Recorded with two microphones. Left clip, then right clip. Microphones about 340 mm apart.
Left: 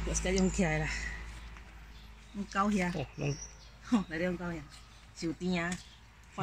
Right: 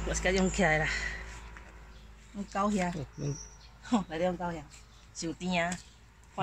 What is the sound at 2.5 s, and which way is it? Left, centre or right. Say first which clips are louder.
Speech: right 1 dB; centre.